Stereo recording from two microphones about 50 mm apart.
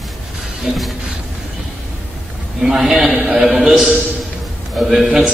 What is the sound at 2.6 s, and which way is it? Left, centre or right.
A man's voice, centre.